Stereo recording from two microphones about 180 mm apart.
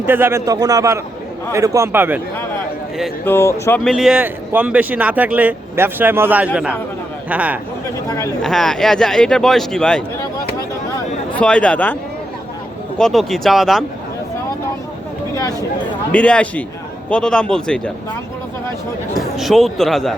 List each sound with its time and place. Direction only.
0.0 s speech: 10° right (ahead or behind)
3.2 s speech: 10° left (ahead or behind)
3.8 s speech: centre (ahead or behind)
11.3 s speech: 5° left (ahead or behind)
13.0 s speech: centre (ahead or behind)
15.4 s speech: 20° left (ahead or behind)
16.1 s speech: 5° left (ahead or behind)
19.2 s speech: centre (ahead or behind)